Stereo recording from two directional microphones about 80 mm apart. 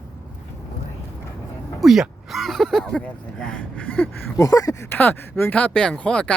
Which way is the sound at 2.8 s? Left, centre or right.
Centre.